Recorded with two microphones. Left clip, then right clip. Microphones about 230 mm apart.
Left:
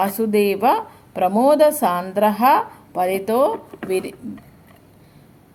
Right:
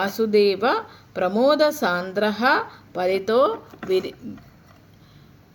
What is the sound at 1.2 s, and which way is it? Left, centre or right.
Speech, left.